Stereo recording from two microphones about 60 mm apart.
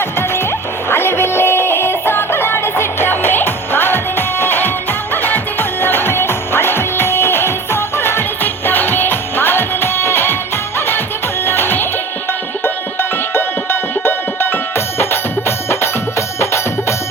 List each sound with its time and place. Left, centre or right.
0.9 s music: left